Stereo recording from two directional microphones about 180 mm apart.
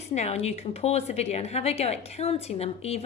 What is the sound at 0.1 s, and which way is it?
A woman's voice, 35° left (ahead or behind).